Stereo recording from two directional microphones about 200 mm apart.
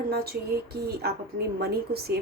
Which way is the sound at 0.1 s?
50° right (ahead or behind).